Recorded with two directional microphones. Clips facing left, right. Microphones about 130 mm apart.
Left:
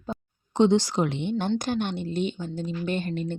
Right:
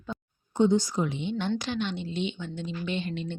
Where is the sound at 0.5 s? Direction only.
85° left.